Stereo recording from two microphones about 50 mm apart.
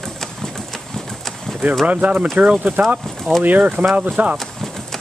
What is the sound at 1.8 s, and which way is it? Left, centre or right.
Speech, right.